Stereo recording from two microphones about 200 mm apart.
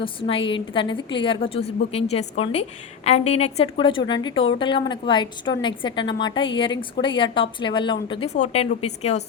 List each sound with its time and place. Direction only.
0.0 s a woman's voice: 25° left (ahead or behind)